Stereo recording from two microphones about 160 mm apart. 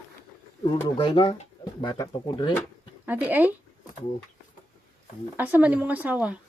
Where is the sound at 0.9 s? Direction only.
35° left (ahead or behind).